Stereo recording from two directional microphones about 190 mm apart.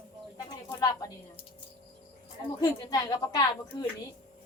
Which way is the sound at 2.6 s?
20° left (ahead or behind).